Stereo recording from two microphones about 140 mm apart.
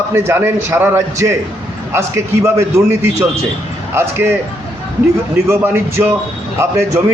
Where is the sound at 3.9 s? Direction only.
15° right (ahead or behind).